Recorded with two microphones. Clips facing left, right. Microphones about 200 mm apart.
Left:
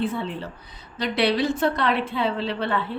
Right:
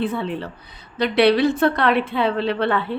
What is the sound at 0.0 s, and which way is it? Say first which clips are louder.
A woman's voice: right 3 dB; 65° right (ahead or behind).